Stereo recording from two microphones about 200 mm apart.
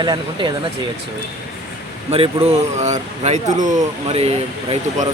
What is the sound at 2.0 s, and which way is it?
Speech, 30° right (ahead or behind).